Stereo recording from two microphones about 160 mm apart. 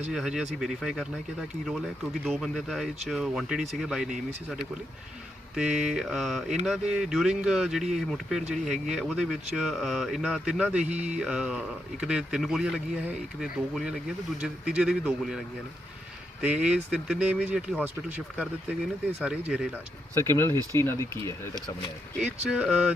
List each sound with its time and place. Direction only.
0.1 s speech: 5° right (ahead or behind)
5.5 s speech: 5° right (ahead or behind)
16.4 s speech: 5° right (ahead or behind)
19.2 s speech: 5° right (ahead or behind)
20.1 s speech: 15° left (ahead or behind)
22.4 s speech: 5° right (ahead or behind)